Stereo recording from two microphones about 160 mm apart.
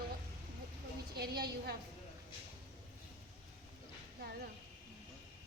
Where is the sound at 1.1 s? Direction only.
90° right.